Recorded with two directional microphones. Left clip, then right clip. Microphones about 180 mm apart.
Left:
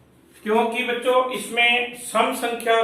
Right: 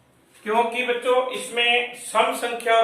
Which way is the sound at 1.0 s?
15° right (ahead or behind).